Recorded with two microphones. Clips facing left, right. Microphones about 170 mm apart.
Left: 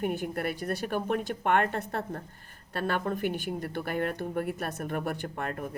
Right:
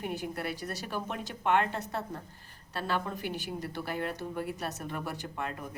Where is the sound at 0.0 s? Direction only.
55° left (ahead or behind).